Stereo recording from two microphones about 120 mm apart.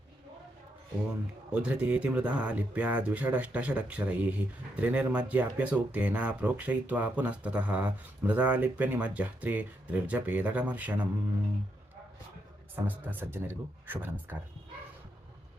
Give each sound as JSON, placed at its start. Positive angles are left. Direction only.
{"t": 1.5, "sound": "speech", "side_deg": -10}
{"t": 12.7, "sound": "speech", "side_deg": -15}